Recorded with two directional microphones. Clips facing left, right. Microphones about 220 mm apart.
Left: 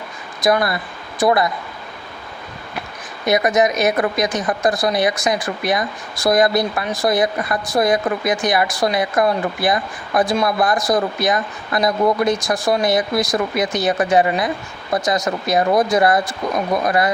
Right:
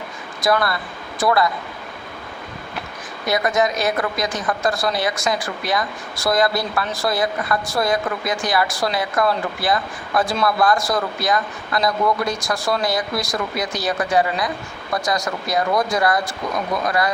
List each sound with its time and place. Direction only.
0.4 s a woman's voice: 20° left (ahead or behind)
3.2 s a woman's voice: 20° left (ahead or behind)